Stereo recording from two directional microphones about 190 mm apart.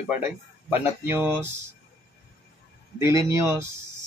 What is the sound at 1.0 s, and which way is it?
Speech, 10° right (ahead or behind).